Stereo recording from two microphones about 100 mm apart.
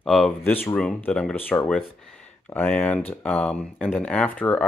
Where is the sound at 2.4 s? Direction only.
15° left (ahead or behind).